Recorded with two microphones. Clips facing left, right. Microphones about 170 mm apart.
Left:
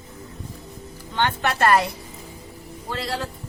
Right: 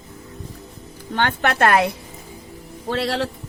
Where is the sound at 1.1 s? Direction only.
55° right (ahead or behind).